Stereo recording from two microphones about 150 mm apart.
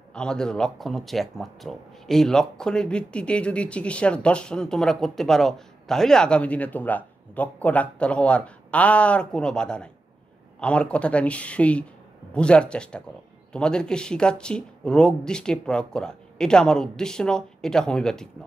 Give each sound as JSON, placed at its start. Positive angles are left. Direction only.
{"t": 0.1, "sound": "speech", "side_deg": 5}